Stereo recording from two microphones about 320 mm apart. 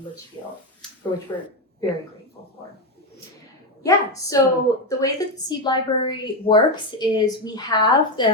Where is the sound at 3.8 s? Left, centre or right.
Centre.